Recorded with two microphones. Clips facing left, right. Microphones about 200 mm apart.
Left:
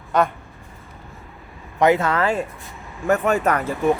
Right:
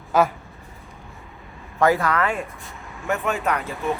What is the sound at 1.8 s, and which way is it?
Speech, 20° left (ahead or behind).